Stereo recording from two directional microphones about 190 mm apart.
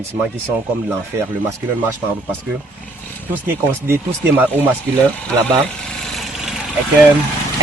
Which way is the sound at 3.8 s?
10° right (ahead or behind).